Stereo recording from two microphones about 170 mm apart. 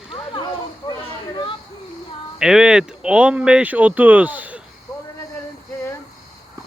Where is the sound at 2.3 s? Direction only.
5° right (ahead or behind).